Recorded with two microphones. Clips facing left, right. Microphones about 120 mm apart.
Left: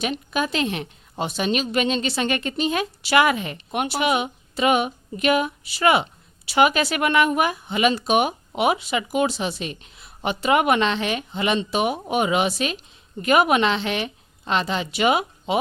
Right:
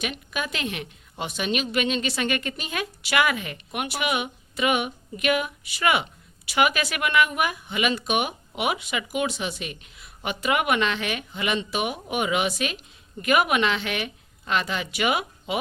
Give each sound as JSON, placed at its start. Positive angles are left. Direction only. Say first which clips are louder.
{"t": 0.0, "sound": "a woman's voice", "louder": "left 6 dB", "side_deg": 30}